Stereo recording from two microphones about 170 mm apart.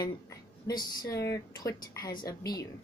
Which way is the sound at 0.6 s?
25° left (ahead or behind).